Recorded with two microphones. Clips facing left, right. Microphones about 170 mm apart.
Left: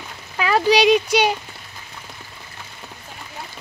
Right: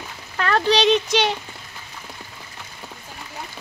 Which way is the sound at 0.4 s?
10° left (ahead or behind).